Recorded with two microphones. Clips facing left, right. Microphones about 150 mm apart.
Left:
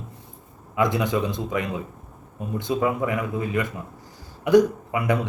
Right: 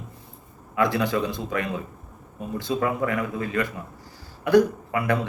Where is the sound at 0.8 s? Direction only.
20° left (ahead or behind).